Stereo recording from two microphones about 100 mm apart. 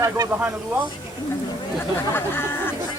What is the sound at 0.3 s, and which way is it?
Speech, 20° right (ahead or behind).